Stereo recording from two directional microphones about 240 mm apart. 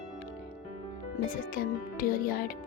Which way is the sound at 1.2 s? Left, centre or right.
Left.